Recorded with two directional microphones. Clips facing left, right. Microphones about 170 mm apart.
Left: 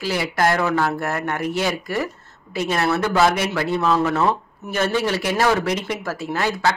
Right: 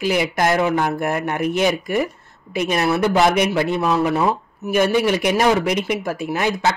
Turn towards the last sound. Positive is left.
turn(degrees=-15)  # may be behind; listen again after turning